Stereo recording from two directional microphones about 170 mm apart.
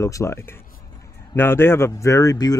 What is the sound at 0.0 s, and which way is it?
Speech, 20° left (ahead or behind).